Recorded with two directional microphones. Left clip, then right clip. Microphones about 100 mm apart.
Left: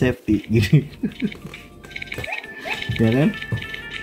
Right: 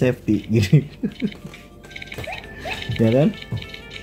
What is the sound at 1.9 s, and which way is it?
Music, 45° right (ahead or behind).